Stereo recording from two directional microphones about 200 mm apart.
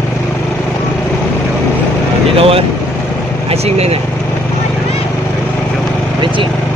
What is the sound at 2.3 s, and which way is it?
Speech, 30° right (ahead or behind).